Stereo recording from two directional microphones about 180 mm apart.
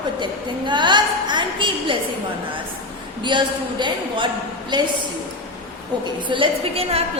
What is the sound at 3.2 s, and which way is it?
A man's voice, 25° right (ahead or behind).